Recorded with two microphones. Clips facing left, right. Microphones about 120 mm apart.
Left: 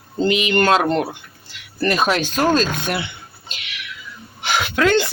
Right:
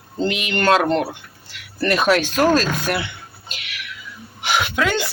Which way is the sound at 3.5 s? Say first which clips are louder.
Even; centre (ahead or behind).